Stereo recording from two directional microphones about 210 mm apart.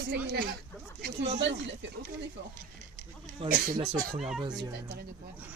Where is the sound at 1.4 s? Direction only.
60° right (ahead or behind).